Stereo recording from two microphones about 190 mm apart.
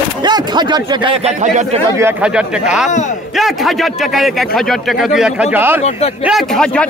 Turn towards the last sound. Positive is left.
turn(degrees=5)  # may be behind; listen again after turning